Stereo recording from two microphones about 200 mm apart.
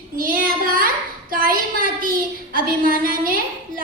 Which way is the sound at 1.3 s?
45° right (ahead or behind).